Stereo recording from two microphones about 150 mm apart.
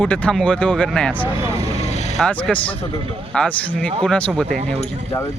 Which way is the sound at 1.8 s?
45° left (ahead or behind).